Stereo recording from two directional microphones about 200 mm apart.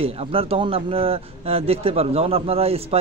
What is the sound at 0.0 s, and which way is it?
A man's voice, 30° right (ahead or behind).